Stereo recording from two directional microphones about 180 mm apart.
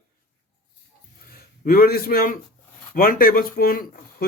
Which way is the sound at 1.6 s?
55° left (ahead or behind).